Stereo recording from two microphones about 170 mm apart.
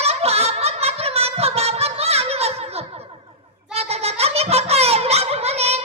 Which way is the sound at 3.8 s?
35° right (ahead or behind).